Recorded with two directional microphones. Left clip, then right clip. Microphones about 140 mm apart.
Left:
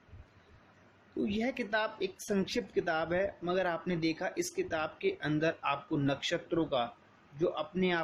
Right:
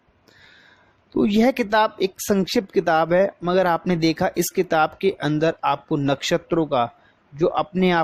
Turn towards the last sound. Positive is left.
turn(degrees=-90)